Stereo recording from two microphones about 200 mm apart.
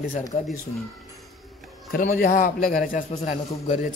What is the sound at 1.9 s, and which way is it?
A man's voice, 40° left (ahead or behind).